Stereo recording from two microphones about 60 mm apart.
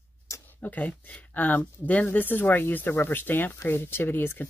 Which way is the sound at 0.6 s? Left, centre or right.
Left.